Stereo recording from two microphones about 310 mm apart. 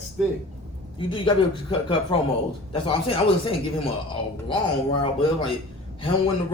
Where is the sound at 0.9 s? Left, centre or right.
Centre.